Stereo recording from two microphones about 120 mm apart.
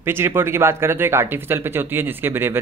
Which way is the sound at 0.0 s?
20° right (ahead or behind).